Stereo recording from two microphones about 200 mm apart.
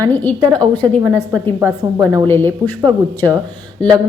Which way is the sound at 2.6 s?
15° right (ahead or behind).